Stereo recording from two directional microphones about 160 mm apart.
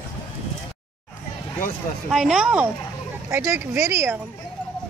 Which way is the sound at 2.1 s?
5° right (ahead or behind).